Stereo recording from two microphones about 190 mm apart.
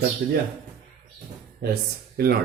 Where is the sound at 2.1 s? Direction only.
55° right (ahead or behind).